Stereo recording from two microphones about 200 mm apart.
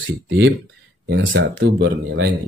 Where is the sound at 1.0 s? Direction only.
65° right (ahead or behind).